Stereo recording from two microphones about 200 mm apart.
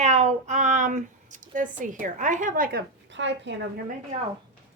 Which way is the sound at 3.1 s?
65° right (ahead or behind).